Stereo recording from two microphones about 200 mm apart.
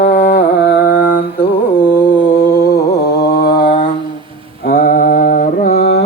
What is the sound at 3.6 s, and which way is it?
Mantra, 55° left (ahead or behind).